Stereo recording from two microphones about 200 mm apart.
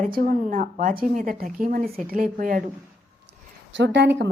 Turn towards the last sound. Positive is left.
turn(degrees=-60)  # may be behind; listen again after turning